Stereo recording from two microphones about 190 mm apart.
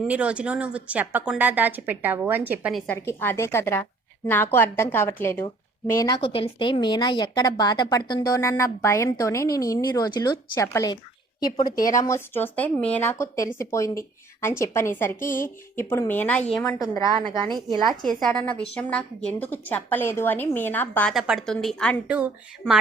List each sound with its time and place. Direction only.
0.1 s a woman's voice: 5° right (ahead or behind)
2.7 s a woman's voice: 10° left (ahead or behind)
17.2 s a woman's voice: 25° right (ahead or behind)
18.8 s speech: 5° left (ahead or behind)
21.2 s a woman's voice: centre (ahead or behind)
22.0 s a woman's voice: 5° right (ahead or behind)